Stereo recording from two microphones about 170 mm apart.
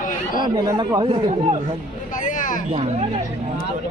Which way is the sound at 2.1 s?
50° left (ahead or behind).